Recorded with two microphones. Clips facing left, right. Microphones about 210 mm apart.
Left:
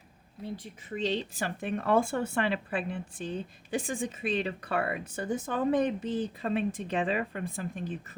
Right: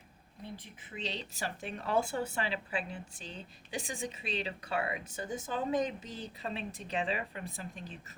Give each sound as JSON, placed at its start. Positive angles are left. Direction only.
{"t": 0.9, "sound": "speech", "side_deg": 45}